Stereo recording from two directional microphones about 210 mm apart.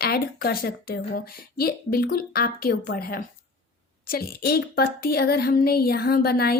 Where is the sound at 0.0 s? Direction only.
45° left (ahead or behind).